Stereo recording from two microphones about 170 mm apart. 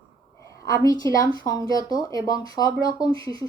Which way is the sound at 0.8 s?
20° left (ahead or behind).